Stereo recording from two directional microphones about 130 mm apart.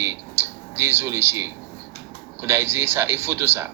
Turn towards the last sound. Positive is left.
turn(degrees=-20)  # may be behind; listen again after turning